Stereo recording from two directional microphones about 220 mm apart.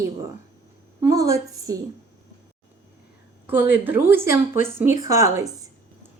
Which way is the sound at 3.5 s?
10° right (ahead or behind).